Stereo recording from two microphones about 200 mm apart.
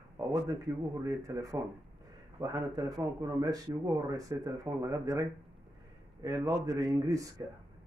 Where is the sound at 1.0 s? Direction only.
15° right (ahead or behind).